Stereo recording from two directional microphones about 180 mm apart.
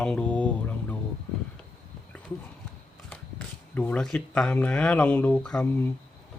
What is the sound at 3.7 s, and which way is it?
Speech, 10° left (ahead or behind).